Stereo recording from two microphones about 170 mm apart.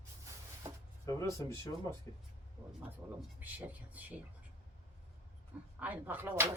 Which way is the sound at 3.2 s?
10° right (ahead or behind).